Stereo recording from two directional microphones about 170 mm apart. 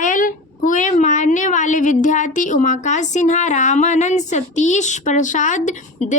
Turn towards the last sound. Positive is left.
turn(degrees=45)  # may be behind; listen again after turning